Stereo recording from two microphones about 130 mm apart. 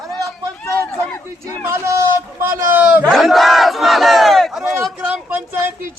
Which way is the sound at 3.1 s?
Centre (ahead or behind).